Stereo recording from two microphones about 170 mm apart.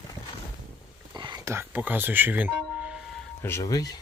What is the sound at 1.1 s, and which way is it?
Music, 25° right (ahead or behind).